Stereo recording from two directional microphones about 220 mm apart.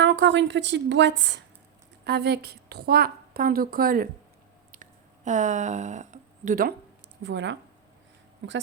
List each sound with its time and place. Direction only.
0.0 s a woman's voice: 55° right (ahead or behind)
4.7 s a sound: 35° right (ahead or behind)
7.2 s a woman's voice: 55° right (ahead or behind)